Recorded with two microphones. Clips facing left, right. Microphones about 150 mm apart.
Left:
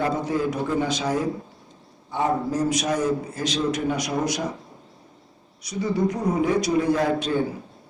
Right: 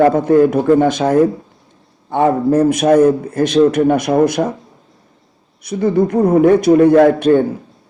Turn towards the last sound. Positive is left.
turn(degrees=-55)  # may be behind; listen again after turning